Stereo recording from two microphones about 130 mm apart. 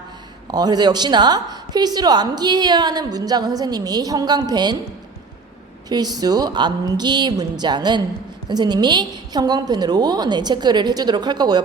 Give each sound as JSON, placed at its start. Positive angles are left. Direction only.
{"t": 0.4, "sound": "a woman's voice", "side_deg": -30}
{"t": 5.9, "sound": "a woman's voice", "side_deg": -30}